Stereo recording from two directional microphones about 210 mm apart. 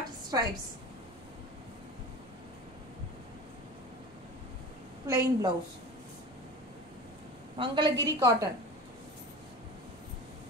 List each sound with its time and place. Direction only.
0.3 s a woman's voice: 15° right (ahead or behind)
5.0 s a woman's voice: 15° right (ahead or behind)
7.5 s a woman's voice: 25° right (ahead or behind)